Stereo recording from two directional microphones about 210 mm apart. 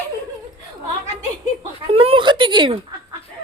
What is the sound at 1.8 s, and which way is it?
Speech, 25° right (ahead or behind).